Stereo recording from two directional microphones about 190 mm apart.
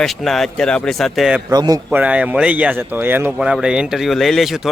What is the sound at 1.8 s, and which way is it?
Speech, 5° right (ahead or behind).